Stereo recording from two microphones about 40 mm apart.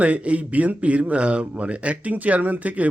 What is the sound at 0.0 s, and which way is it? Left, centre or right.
A man's voice, right.